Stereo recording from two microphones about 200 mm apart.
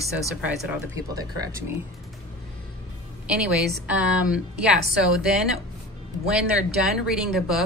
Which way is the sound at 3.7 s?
5° right (ahead or behind).